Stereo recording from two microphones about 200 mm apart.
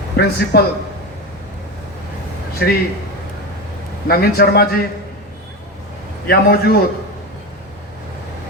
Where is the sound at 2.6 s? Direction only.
50° left (ahead or behind).